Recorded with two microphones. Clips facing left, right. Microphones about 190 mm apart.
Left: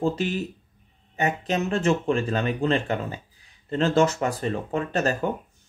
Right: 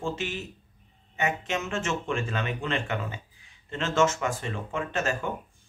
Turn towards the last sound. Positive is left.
turn(degrees=35)  # may be behind; listen again after turning